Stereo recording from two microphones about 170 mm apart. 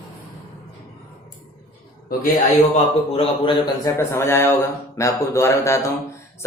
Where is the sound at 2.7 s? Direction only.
30° left (ahead or behind).